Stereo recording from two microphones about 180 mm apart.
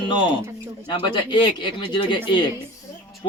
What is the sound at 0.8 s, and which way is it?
Speech, 25° left (ahead or behind).